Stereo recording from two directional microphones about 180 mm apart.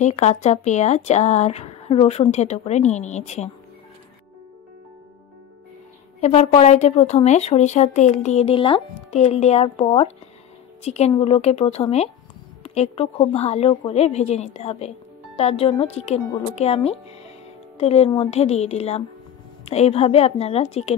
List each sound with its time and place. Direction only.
0.0 s a woman's voice: 40° left (ahead or behind)
6.2 s a woman's voice: 40° left (ahead or behind)